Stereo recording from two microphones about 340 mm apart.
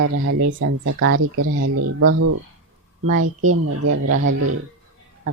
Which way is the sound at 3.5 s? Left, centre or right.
Right.